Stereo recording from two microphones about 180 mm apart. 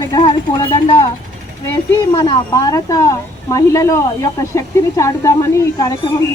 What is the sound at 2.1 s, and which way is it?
Speech, 20° left (ahead or behind).